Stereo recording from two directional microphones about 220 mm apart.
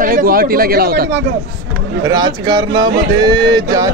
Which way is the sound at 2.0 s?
20° right (ahead or behind).